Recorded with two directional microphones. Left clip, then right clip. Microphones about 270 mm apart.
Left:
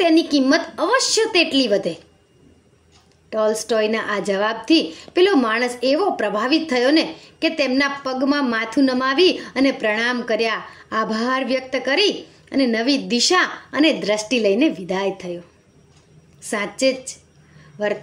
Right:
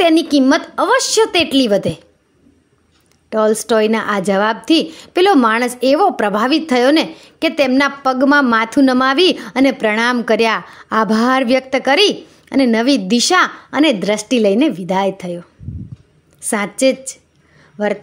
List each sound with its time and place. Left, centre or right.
0.0 s speech: right
3.3 s speech: right
16.4 s speech: right